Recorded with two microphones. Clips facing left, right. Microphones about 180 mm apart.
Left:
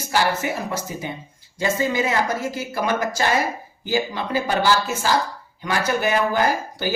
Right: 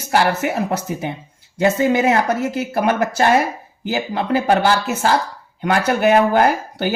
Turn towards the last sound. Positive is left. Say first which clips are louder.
# right 5 dB
turn(degrees=-60)  # may be behind; listen again after turning